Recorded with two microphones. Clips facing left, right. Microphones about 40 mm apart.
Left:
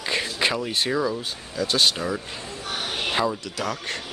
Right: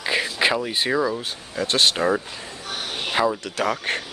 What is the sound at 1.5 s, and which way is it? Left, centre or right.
Speech, right.